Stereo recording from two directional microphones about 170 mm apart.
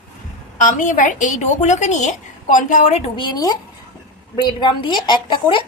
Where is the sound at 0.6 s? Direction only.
50° left (ahead or behind).